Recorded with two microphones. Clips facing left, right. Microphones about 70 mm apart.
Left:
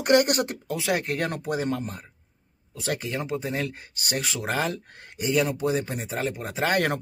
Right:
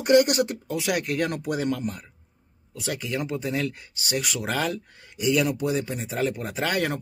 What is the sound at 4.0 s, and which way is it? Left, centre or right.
Speech, left.